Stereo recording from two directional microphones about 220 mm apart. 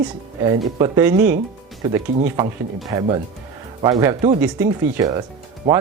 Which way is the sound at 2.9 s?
15° right (ahead or behind).